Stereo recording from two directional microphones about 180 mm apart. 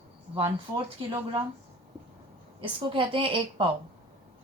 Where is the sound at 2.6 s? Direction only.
30° right (ahead or behind).